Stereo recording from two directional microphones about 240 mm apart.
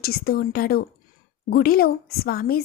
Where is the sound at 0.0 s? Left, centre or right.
Left.